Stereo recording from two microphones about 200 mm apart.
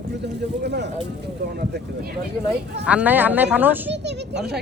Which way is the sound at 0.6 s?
55° right (ahead or behind).